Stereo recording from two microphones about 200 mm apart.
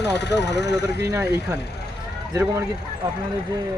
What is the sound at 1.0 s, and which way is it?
Speech, 10° right (ahead or behind).